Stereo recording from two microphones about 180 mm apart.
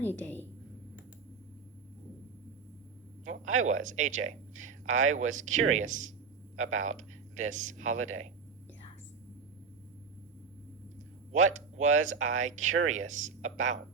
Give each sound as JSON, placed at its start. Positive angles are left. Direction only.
{"t": 0.0, "sound": "a woman's voice", "side_deg": 10}
{"t": 3.2, "sound": "speech", "side_deg": -40}
{"t": 11.3, "sound": "speech", "side_deg": -40}